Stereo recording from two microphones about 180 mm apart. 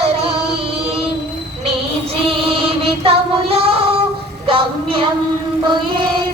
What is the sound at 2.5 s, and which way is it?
Music, 30° right (ahead or behind).